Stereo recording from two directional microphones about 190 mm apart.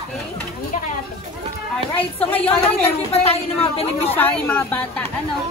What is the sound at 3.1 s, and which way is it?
A woman's voice, 30° left (ahead or behind).